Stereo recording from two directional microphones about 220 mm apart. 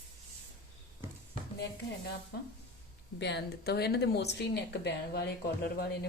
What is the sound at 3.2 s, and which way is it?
Speech, 50° left (ahead or behind).